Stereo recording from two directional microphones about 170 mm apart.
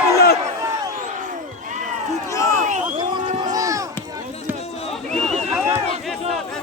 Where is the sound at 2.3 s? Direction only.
15° left (ahead or behind).